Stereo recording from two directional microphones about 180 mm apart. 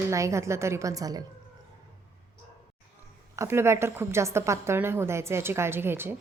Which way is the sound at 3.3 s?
15° right (ahead or behind).